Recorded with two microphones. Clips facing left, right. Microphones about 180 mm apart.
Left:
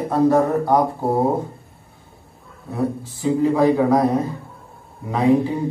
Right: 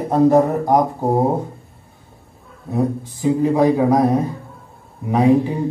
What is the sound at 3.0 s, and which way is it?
Speech, 20° right (ahead or behind).